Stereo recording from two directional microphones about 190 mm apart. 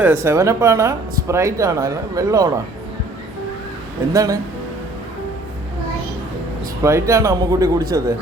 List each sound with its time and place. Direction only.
0.0 s speech: 10° right (ahead or behind)
4.1 s speech: 20° right (ahead or behind)
6.8 s speech: 15° right (ahead or behind)